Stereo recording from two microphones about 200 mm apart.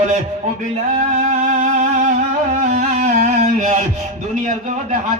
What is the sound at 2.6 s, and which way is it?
Music, 40° right (ahead or behind).